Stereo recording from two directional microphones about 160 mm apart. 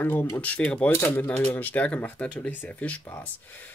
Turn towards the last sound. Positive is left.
turn(degrees=10)  # may be behind; listen again after turning